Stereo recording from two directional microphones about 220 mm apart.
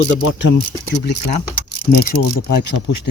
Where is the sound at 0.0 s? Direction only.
60° left (ahead or behind).